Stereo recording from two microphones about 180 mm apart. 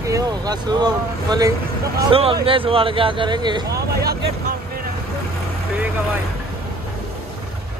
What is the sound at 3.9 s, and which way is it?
Speech, 60° right (ahead or behind).